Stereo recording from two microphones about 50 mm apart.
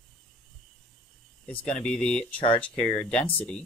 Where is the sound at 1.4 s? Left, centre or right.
Left.